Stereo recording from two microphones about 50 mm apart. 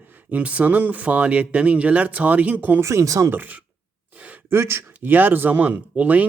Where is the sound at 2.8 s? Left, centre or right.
Right.